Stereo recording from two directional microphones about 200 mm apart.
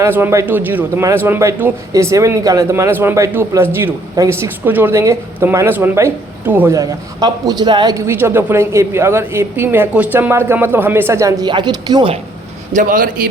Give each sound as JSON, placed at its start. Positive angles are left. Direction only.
{"t": 0.0, "sound": "a man's voice", "side_deg": -10}
{"t": 12.7, "sound": "a man's voice", "side_deg": -45}